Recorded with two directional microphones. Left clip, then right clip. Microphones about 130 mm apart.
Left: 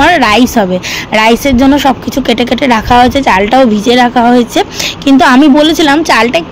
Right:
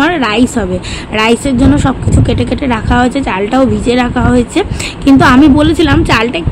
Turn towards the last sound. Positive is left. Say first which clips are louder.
# left 4 dB
turn(degrees=55)  # may be behind; listen again after turning